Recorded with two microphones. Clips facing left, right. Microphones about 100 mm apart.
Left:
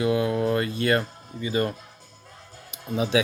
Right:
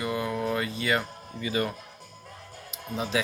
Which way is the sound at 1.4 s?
30° left (ahead or behind).